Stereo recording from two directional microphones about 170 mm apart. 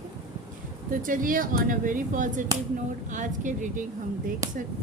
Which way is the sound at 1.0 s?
55° right (ahead or behind).